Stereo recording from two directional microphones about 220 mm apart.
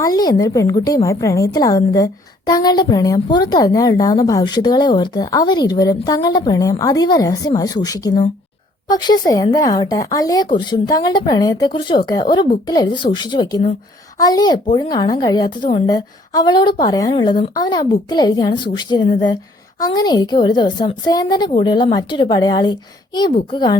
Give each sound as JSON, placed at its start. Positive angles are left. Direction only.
{"t": 0.0, "sound": "a woman's voice", "side_deg": 15}